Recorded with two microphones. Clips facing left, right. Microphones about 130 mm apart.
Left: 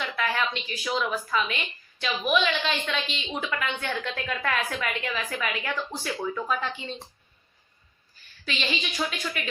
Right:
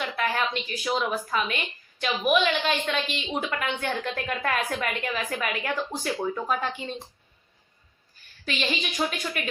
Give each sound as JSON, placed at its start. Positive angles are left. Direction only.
{"t": 0.0, "sound": "a woman's voice", "side_deg": -45}
{"t": 8.4, "sound": "speech", "side_deg": -45}